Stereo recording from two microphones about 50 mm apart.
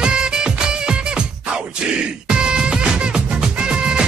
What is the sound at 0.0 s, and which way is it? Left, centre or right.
Music, centre.